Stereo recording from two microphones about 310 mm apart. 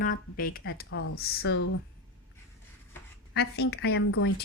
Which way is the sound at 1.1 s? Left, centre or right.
Left.